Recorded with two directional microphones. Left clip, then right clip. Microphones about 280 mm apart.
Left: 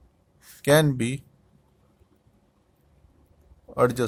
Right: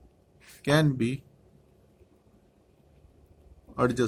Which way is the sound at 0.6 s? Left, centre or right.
Left.